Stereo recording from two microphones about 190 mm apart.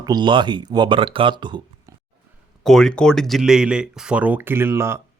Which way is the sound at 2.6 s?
Centre (ahead or behind).